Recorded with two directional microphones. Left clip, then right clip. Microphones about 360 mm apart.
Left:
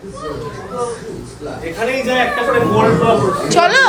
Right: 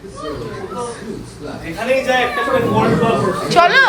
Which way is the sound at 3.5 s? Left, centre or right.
Centre.